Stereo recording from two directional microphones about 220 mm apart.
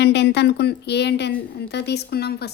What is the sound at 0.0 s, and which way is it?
Speech, 50° left (ahead or behind).